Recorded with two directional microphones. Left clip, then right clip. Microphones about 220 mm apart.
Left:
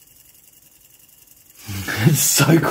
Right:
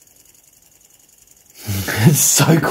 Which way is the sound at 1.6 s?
20° right (ahead or behind).